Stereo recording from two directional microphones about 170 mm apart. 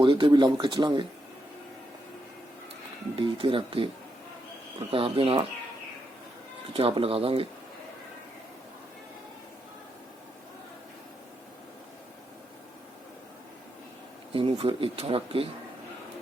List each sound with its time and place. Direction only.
0.0 s speech: 30° right (ahead or behind)
3.2 s speech: 30° right (ahead or behind)
4.9 s speech: 30° right (ahead or behind)
6.7 s speech: 35° right (ahead or behind)
14.3 s speech: 30° right (ahead or behind)